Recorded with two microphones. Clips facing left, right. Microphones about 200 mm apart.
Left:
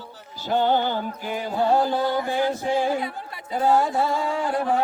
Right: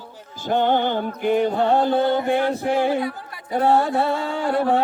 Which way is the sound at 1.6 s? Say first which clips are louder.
Right 3 dB; 25° right (ahead or behind).